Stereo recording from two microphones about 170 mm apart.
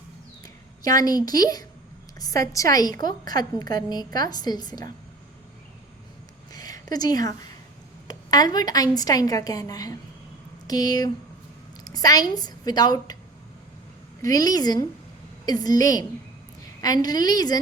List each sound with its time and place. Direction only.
0.4 s a woman's voice: 20° left (ahead or behind)
6.5 s a sound: 20° left (ahead or behind)
8.0 s a woman's voice: 25° left (ahead or behind)
14.2 s a woman's voice: 20° left (ahead or behind)